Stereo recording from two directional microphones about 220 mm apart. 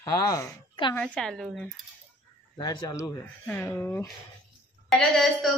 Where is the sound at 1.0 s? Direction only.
5° left (ahead or behind).